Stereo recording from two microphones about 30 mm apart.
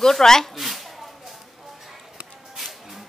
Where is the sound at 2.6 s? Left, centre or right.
Centre.